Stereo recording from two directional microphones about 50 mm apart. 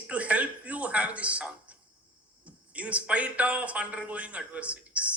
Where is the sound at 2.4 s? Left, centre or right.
Right.